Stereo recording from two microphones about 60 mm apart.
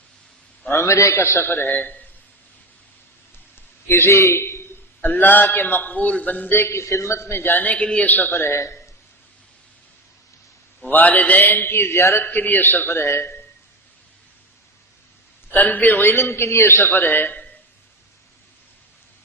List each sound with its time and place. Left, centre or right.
0.7 s a man's voice: left
3.8 s a man's voice: left
5.0 s a man's voice: left
6.7 s a man's voice: left
7.5 s a man's voice: left
8.4 s a man's voice: left
10.8 s a man's voice: left
12.2 s a man's voice: left
15.5 s a man's voice: left